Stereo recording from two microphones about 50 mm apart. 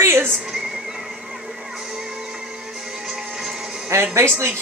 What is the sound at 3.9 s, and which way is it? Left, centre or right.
Speech, right.